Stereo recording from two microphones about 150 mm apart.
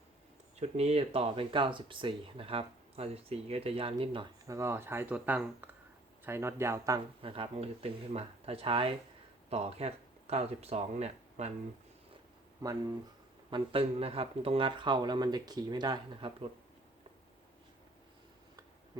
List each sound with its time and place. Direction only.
0.6 s speech: 45° right (ahead or behind)
4.4 s speech: 20° right (ahead or behind)
7.2 s speech: 35° right (ahead or behind)
12.6 s speech: 25° right (ahead or behind)
13.5 s speech: 40° right (ahead or behind)